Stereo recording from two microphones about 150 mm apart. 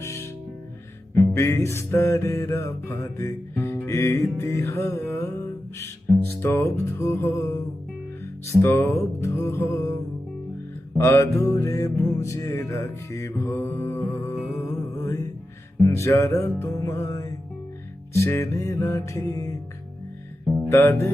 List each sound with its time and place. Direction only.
0.0 s music: 20° left (ahead or behind)
6.4 s music: 15° left (ahead or behind)
8.6 s music: 15° left (ahead or behind)
10.9 s music: 20° left (ahead or behind)
14.9 s mantra: 20° left (ahead or behind)
15.8 s music: 20° left (ahead or behind)
20.7 s music: 15° left (ahead or behind)